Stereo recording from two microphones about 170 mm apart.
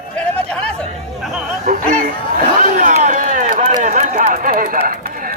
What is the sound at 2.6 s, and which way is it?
Run, 45° right (ahead or behind).